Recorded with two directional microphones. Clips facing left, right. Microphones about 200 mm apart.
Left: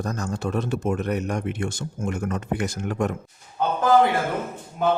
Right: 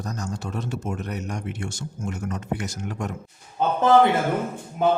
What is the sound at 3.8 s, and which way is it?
Speech, 25° right (ahead or behind).